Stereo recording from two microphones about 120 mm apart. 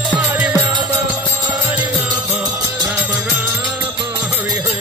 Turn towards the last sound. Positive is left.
turn(degrees=-15)  # may be behind; listen again after turning